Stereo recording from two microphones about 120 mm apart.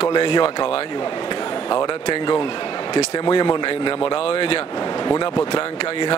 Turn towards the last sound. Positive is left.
turn(degrees=40)  # may be behind; listen again after turning